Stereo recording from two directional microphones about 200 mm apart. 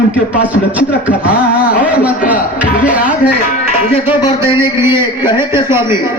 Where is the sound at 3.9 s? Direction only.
25° left (ahead or behind).